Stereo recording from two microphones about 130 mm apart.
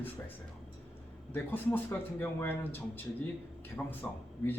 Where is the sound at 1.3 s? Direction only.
15° left (ahead or behind).